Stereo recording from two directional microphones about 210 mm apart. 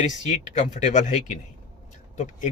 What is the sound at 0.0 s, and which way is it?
Speech, 35° left (ahead or behind).